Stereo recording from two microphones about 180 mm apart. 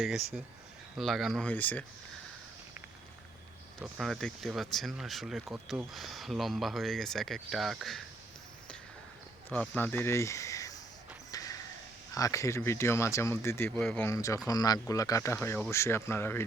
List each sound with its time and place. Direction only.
0.0 s speech: centre (ahead or behind)
3.8 s speech: centre (ahead or behind)
9.5 s speech: 10° left (ahead or behind)
11.3 s a sound: 20° left (ahead or behind)
12.1 s speech: 20° left (ahead or behind)